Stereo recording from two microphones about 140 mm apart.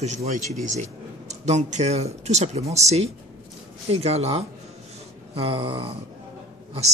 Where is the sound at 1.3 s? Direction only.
55° right (ahead or behind).